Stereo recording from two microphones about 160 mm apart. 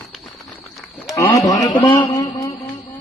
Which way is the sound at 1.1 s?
20° left (ahead or behind).